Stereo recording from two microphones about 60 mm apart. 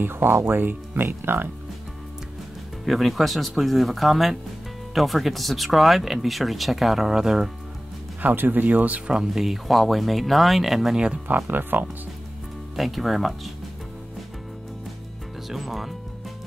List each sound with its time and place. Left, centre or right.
0.0 s speech: right
2.8 s speech: centre
8.2 s speech: right
9.1 s speech: centre
11.2 s speech: right
12.7 s speech: centre
15.5 s speech: centre